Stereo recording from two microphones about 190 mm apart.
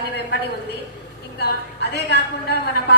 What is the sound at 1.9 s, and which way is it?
A woman's voice, 55° left (ahead or behind).